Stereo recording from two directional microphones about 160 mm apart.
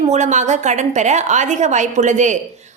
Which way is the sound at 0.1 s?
50° right (ahead or behind).